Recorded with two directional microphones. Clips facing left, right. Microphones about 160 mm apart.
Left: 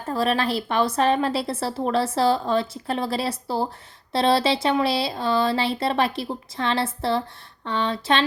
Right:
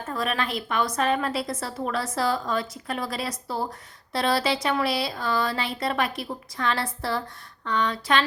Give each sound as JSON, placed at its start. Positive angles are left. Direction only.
{"t": 0.1, "sound": "speech", "side_deg": 30}